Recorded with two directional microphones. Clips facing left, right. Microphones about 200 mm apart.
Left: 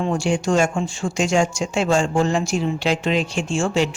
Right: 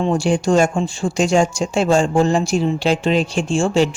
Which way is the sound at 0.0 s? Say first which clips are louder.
Right 4 dB; 35° right (ahead or behind).